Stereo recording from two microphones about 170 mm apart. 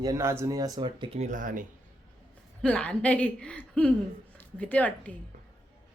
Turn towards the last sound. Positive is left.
turn(degrees=10)  # may be behind; listen again after turning